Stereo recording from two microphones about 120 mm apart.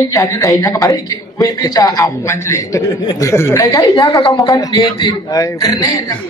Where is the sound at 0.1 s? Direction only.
25° left (ahead or behind).